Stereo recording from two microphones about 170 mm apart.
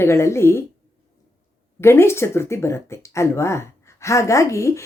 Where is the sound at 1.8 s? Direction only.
15° left (ahead or behind).